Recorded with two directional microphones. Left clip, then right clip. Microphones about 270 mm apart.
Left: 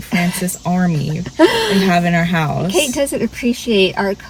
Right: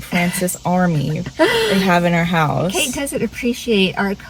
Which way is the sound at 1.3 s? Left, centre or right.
Centre.